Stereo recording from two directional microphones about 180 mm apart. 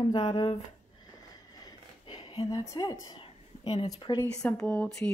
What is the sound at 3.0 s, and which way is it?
Speech, 25° left (ahead or behind).